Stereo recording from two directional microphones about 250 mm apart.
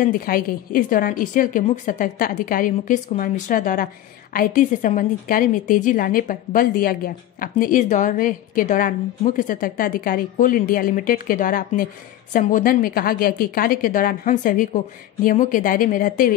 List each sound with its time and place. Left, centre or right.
0.0 s a woman's voice: left